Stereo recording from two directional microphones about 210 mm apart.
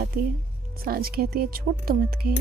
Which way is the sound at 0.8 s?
45° right (ahead or behind).